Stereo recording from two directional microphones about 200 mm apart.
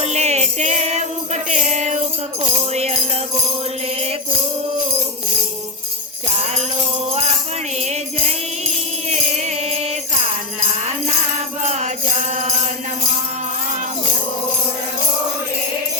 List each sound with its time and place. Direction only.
0.0 s music: 35° right (ahead or behind)
6.2 s jingle bell: 30° right (ahead or behind)
7.8 s music: 35° right (ahead or behind)
11.6 s music: 35° right (ahead or behind)